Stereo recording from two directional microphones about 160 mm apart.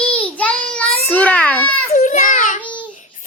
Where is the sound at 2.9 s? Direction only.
55° left (ahead or behind).